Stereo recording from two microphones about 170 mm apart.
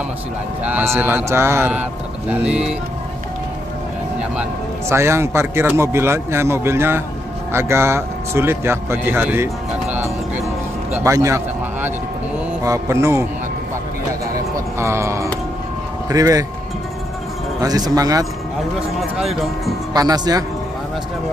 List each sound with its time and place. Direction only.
0.7 s a man's voice: 10° right (ahead or behind)
4.2 s a man's voice: 10° right (ahead or behind)
14.3 s a man's voice: 15° right (ahead or behind)
17.6 s speech: 20° right (ahead or behind)
18.9 s speech: centre (ahead or behind)
19.9 s speech: 20° right (ahead or behind)